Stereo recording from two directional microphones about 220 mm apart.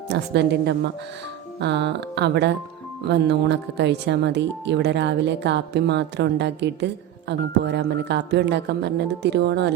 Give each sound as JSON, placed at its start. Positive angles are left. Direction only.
{"t": 0.1, "sound": "speech", "side_deg": -50}